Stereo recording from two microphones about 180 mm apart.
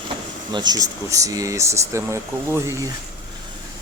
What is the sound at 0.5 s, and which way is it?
Speech, 20° right (ahead or behind).